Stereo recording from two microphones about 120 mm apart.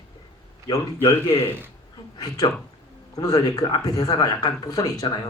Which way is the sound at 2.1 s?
30° left (ahead or behind).